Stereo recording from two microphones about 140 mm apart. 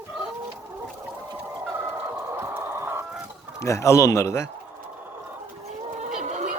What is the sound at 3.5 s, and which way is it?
Speech, 20° left (ahead or behind).